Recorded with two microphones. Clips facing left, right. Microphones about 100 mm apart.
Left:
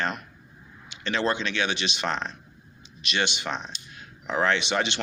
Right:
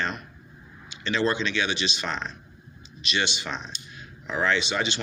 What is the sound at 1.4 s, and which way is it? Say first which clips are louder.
Speech: right 1 dB; 55° left (ahead or behind).